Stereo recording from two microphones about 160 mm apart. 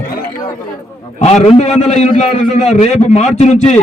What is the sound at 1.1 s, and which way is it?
A man's voice, 45° left (ahead or behind).